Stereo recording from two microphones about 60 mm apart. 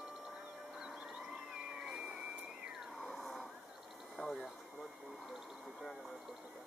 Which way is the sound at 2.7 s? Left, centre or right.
Centre.